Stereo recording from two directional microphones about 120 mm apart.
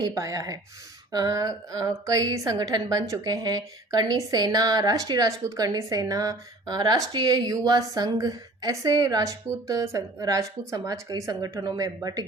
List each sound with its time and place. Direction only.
0.0 s a woman's voice: 30° right (ahead or behind)